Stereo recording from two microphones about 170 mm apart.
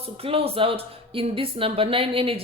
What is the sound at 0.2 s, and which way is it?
A woman's voice, 35° right (ahead or behind).